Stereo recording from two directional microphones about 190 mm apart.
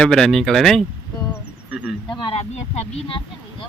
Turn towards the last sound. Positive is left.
turn(degrees=35)  # may be behind; listen again after turning